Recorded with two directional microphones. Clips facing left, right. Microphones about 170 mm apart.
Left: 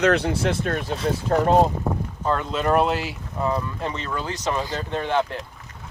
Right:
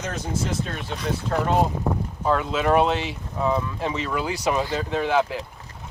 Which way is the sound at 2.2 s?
5° right (ahead or behind).